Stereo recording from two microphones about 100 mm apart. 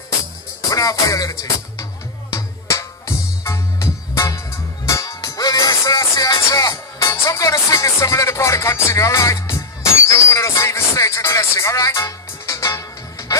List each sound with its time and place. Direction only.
0.6 s music: 35° left (ahead or behind)